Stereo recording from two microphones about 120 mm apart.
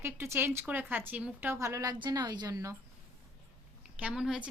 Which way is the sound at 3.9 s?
5° right (ahead or behind).